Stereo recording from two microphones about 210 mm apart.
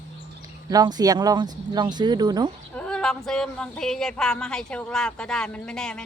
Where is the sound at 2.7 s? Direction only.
5° left (ahead or behind).